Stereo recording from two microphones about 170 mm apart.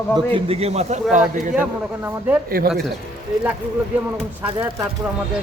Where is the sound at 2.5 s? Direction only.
60° right (ahead or behind).